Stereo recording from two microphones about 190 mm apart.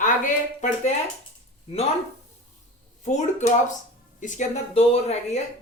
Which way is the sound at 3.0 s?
40° left (ahead or behind).